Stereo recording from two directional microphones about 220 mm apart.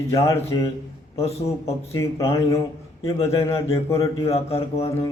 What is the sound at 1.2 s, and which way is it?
Speech, 30° left (ahead or behind).